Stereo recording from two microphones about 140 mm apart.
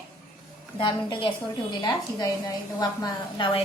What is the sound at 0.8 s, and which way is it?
A woman's voice, 35° left (ahead or behind).